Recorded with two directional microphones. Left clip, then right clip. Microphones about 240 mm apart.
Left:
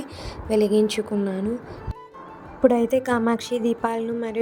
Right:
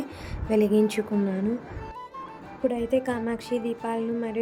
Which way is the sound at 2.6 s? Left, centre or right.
Centre.